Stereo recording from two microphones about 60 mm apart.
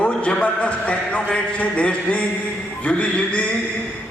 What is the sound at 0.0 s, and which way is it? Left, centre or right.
A man's voice, left.